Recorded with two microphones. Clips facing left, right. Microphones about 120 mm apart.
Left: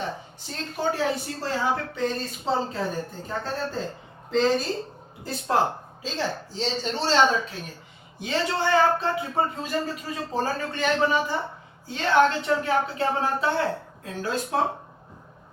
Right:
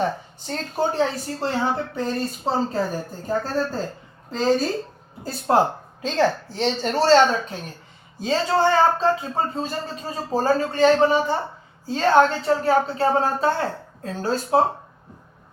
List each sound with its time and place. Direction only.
0.0 s a woman's voice: 45° right (ahead or behind)
8.2 s speech: 30° right (ahead or behind)